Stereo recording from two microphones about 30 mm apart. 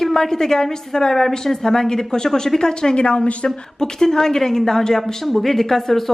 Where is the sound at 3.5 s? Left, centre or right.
Centre.